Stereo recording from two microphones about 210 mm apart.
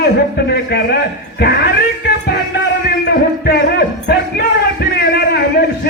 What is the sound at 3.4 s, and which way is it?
Music, 50° left (ahead or behind).